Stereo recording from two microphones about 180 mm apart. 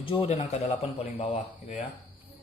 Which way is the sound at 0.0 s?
30° left (ahead or behind).